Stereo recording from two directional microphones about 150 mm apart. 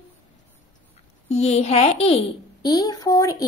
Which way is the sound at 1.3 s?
45° left (ahead or behind).